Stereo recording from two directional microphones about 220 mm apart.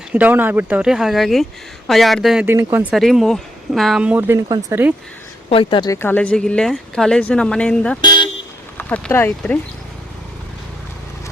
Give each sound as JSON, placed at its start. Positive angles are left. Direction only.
{"t": 0.1, "sound": "speech", "side_deg": -5}
{"t": 2.9, "sound": "speech", "side_deg": 0}
{"t": 5.5, "sound": "speech", "side_deg": 25}
{"t": 8.0, "sound": "vehicle", "side_deg": 20}
{"t": 8.8, "sound": "speech", "side_deg": 5}